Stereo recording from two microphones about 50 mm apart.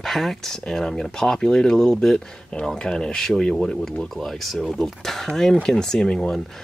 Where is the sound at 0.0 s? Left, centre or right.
Centre.